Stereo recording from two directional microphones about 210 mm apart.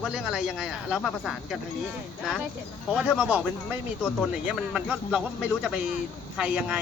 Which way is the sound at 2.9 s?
5° right (ahead or behind).